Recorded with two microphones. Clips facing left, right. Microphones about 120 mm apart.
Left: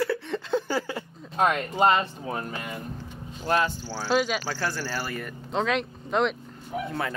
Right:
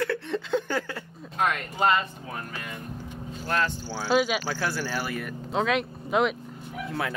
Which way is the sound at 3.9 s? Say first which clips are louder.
Right 1 dB; 10° right (ahead or behind).